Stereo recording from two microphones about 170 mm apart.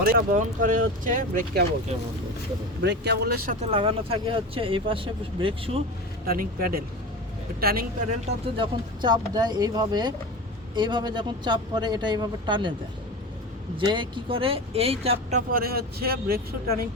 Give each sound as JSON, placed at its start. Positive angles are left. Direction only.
{"t": 0.0, "sound": "speech", "side_deg": -60}
{"t": 2.8, "sound": "speech", "side_deg": -85}
{"t": 3.6, "sound": "speech", "side_deg": -35}
{"t": 6.2, "sound": "speech", "side_deg": -60}
{"t": 8.5, "sound": "a man's voice", "side_deg": -25}
{"t": 13.7, "sound": "speech", "side_deg": -30}
{"t": 15.5, "sound": "speech", "side_deg": -65}